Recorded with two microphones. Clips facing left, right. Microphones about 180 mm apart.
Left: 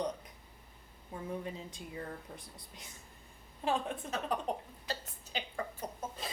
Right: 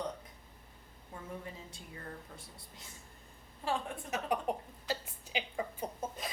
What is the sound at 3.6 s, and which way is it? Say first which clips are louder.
Speech: left 2 dB; 20° left (ahead or behind).